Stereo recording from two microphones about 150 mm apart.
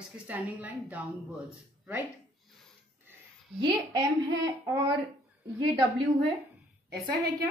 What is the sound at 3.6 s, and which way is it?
Speech, 30° right (ahead or behind).